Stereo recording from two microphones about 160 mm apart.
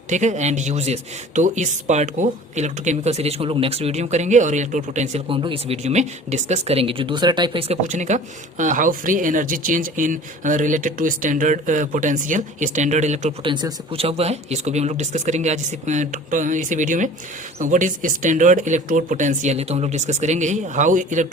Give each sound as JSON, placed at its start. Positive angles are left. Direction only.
{"t": 0.1, "sound": "speech", "side_deg": -50}
{"t": 5.3, "sound": "speech", "side_deg": -35}
{"t": 7.7, "sound": "speech", "side_deg": -50}
{"t": 13.4, "sound": "speech", "side_deg": -30}